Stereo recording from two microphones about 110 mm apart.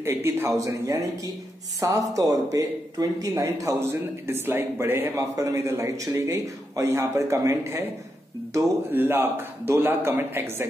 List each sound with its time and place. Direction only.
0.0 s speech: 20° right (ahead or behind)